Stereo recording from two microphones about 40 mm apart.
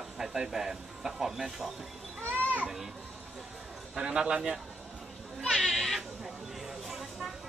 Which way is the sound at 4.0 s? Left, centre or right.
Centre.